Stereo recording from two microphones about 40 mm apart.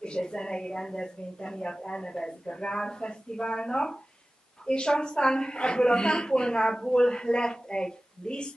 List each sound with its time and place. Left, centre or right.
0.0 s a woman's voice: left